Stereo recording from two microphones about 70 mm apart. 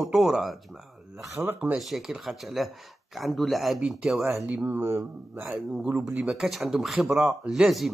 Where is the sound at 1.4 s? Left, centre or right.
Right.